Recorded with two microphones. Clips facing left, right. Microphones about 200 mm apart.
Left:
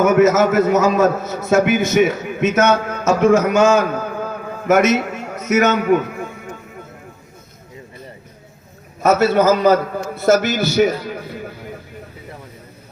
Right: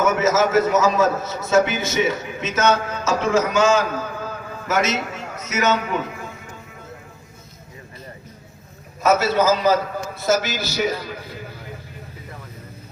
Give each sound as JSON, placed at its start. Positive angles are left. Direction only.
{"t": 0.0, "sound": "a man's voice", "side_deg": 60}
{"t": 9.1, "sound": "a man's voice", "side_deg": 55}